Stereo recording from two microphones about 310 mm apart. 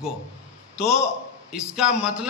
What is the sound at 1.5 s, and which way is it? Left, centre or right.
Speech, centre.